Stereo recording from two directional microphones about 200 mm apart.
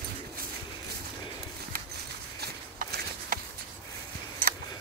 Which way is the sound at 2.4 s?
50° right (ahead or behind).